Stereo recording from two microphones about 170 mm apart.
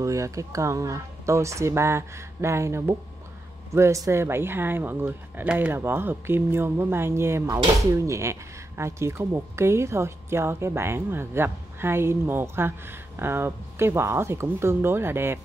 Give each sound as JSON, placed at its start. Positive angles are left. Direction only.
{"t": 0.0, "sound": "speech", "side_deg": -20}